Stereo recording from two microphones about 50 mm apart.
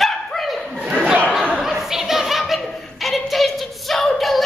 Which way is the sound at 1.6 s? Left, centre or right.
Centre.